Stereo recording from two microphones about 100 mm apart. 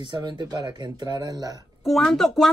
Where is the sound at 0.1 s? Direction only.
45° right (ahead or behind).